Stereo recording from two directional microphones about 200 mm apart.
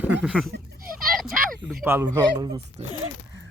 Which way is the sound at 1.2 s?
Centre (ahead or behind).